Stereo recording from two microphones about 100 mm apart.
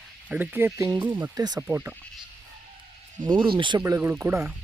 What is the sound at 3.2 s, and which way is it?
Speech, 55° right (ahead or behind).